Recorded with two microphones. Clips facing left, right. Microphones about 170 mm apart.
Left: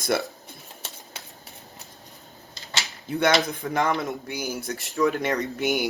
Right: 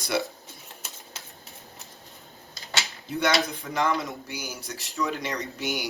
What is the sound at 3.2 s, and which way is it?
Speech, 55° left (ahead or behind).